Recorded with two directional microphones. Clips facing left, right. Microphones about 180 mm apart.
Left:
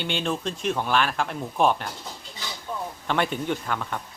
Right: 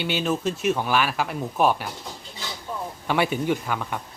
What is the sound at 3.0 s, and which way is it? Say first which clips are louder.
Speech: right 3 dB; 10° right (ahead or behind).